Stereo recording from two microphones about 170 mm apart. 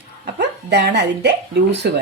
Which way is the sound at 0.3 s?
85° right.